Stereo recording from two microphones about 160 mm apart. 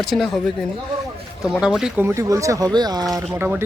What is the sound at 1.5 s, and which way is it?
Speech, 5° right (ahead or behind).